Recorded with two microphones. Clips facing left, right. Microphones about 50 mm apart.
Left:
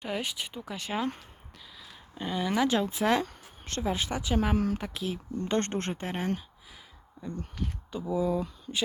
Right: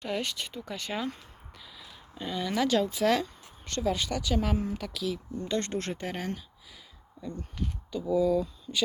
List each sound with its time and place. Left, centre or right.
0.0 s speech: centre
2.1 s speech: left
4.5 s speech: left
4.8 s speech: left
5.9 s speech: left
7.9 s speech: left